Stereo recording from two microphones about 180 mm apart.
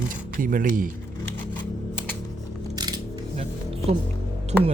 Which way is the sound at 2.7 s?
20° right (ahead or behind).